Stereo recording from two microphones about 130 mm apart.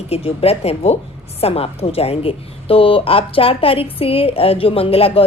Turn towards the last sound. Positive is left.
turn(degrees=45)  # may be behind; listen again after turning